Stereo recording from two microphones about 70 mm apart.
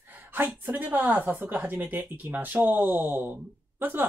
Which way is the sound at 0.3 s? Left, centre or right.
Right.